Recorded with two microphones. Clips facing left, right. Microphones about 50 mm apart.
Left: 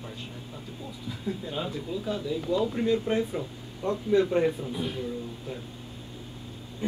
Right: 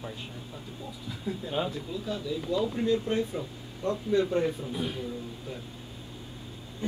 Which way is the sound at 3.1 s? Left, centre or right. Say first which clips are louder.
Left 2 dB; left.